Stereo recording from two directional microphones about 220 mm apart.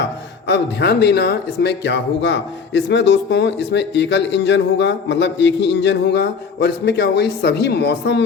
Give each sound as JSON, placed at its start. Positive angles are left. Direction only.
{"t": 0.4, "sound": "speech", "side_deg": 50}